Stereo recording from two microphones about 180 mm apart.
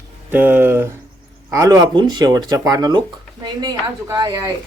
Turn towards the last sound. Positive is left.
turn(degrees=-25)  # may be behind; listen again after turning